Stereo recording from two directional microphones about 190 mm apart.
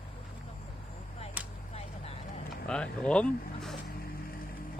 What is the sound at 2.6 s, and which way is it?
Speech, 5° left (ahead or behind).